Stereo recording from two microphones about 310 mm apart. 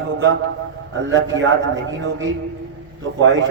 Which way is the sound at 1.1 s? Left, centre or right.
Right.